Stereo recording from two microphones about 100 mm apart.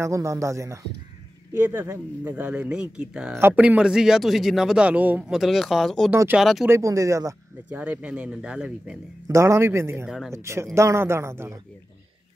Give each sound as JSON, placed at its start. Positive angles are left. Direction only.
{"t": 0.0, "sound": "speech", "side_deg": -30}
{"t": 1.5, "sound": "speech", "side_deg": -20}
{"t": 3.3, "sound": "speech", "side_deg": -20}
{"t": 5.3, "sound": "speech", "side_deg": 0}
{"t": 6.7, "sound": "speech", "side_deg": -30}
{"t": 7.7, "sound": "speech", "side_deg": -15}
{"t": 9.3, "sound": "speech", "side_deg": -30}
{"t": 10.0, "sound": "speech", "side_deg": -5}
{"t": 10.3, "sound": "speech", "side_deg": -30}